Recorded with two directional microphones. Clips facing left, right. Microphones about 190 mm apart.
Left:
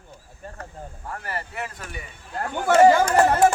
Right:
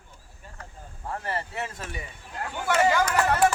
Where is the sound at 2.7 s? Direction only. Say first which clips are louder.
Left 7 dB; 40° left (ahead or behind).